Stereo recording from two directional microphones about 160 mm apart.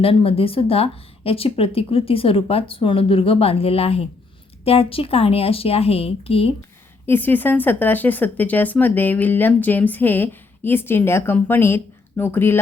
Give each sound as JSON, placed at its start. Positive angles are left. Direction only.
{"t": 0.0, "sound": "speech", "side_deg": 35}
{"t": 7.0, "sound": "speech", "side_deg": 15}